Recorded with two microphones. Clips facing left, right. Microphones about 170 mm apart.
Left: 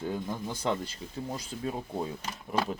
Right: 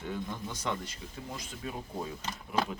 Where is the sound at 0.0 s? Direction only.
35° left (ahead or behind).